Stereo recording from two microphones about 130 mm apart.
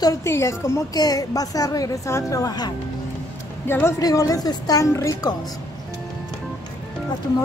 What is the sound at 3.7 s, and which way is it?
A woman's voice, 20° left (ahead or behind).